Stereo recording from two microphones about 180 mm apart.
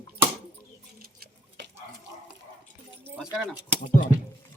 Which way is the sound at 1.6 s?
75° right (ahead or behind).